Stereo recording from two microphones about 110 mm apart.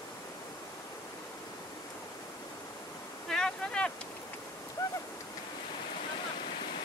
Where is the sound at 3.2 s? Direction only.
5° left (ahead or behind).